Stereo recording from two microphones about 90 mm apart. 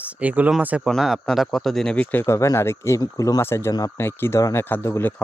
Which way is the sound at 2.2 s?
35° left (ahead or behind).